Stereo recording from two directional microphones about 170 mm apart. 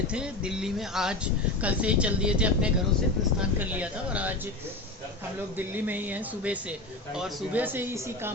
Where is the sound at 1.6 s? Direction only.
5° right (ahead or behind).